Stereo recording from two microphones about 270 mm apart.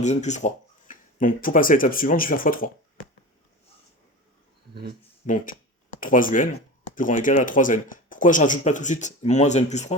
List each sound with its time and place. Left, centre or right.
0.0 s speech: left
4.7 s speech: right
5.2 s speech: left